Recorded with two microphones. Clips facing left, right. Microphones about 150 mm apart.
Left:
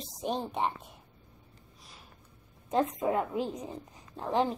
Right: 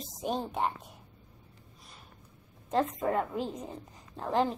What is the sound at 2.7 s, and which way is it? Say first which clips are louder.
A woman's voice: left 1 dB; 5° left (ahead or behind).